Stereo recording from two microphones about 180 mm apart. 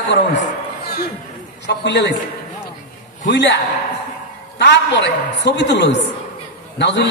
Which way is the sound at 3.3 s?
75° left (ahead or behind).